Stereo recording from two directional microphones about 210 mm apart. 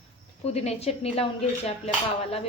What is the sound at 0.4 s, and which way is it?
A woman's voice, 30° left (ahead or behind).